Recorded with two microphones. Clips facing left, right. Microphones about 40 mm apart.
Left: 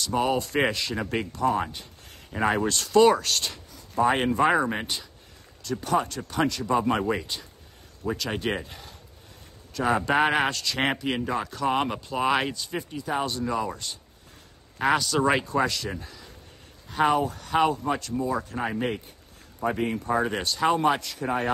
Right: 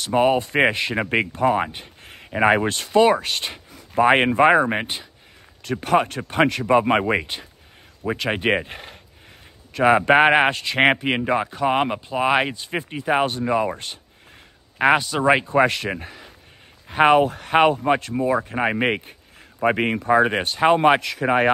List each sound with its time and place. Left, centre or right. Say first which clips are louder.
0.0 s speech: right 6 dB; right
3.7 s speech: right 7 dB; right
5.6 s speech: right 6 dB; right
11.4 s speech: right 5 dB; right
18.7 s speech: right 7 dB; right
20.3 s speech: right 6 dB; right